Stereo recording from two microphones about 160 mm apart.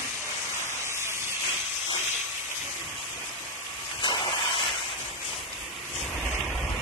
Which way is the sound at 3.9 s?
30° left (ahead or behind).